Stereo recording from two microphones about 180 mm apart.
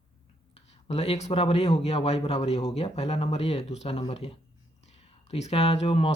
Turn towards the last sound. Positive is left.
turn(degrees=30)  # may be behind; listen again after turning